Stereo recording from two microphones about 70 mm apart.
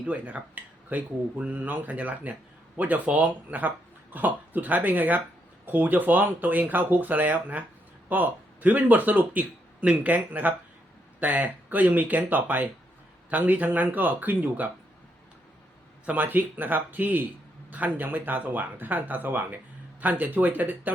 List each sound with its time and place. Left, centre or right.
0.0 s a man's voice: centre
16.0 s a man's voice: right